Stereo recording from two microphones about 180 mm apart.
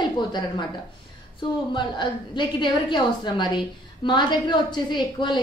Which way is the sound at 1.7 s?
25° left (ahead or behind).